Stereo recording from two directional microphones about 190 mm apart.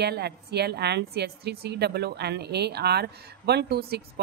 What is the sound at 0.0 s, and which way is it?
A woman's voice, 60° right (ahead or behind).